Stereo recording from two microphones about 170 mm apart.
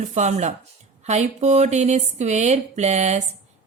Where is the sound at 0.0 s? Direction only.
45° right (ahead or behind).